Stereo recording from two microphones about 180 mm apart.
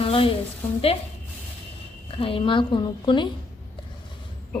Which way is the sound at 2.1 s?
30° left (ahead or behind).